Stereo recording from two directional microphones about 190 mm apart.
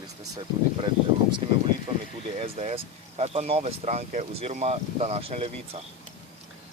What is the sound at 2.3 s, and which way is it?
Speech, 30° right (ahead or behind).